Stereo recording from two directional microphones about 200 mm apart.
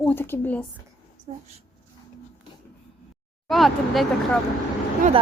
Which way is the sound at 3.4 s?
Centre (ahead or behind).